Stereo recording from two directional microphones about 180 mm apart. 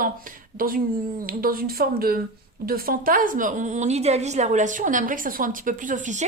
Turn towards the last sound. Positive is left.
turn(degrees=-45)  # may be behind; listen again after turning